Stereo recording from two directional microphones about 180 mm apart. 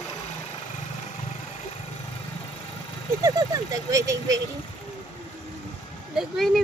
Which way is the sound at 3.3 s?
20° right (ahead or behind).